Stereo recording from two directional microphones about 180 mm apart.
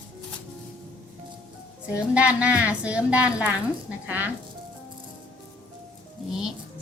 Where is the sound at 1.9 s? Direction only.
5° right (ahead or behind).